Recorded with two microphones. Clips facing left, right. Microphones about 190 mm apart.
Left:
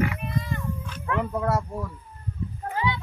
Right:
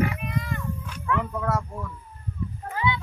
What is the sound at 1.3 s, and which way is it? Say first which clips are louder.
Speech: left 2 dB; 30° left (ahead or behind).